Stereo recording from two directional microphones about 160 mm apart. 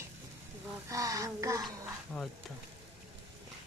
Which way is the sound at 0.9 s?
20° right (ahead or behind).